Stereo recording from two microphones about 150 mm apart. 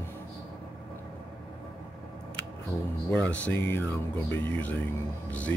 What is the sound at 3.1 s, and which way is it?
Speech, 10° left (ahead or behind).